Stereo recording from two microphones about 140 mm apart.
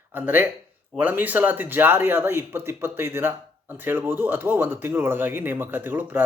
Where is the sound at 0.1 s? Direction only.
15° right (ahead or behind).